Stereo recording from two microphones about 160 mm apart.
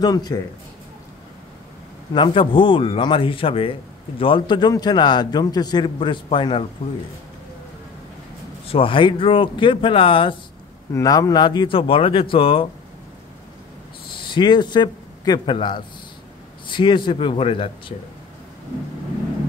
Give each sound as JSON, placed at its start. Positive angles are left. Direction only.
{"t": 0.0, "sound": "a man's voice", "side_deg": 25}
{"t": 2.1, "sound": "a man's voice", "side_deg": 30}
{"t": 8.6, "sound": "speech", "side_deg": 35}
{"t": 10.9, "sound": "speech", "side_deg": 20}
{"t": 14.3, "sound": "a man's voice", "side_deg": 30}